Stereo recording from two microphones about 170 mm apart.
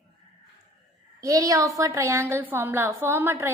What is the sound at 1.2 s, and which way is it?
A woman's voice, 20° right (ahead or behind).